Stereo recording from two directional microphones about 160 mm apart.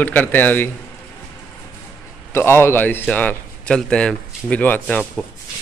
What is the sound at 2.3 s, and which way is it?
Speech, 15° left (ahead or behind).